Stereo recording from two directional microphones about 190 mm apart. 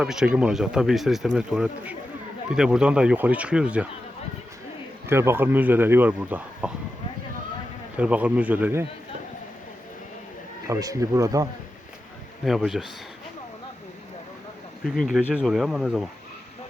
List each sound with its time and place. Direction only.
0.0 s speech: 5° right (ahead or behind)
5.0 s speech: 10° right (ahead or behind)
7.9 s speech: 5° right (ahead or behind)
10.7 s speech: 15° right (ahead or behind)
12.5 s speech: centre (ahead or behind)
14.8 s speech: centre (ahead or behind)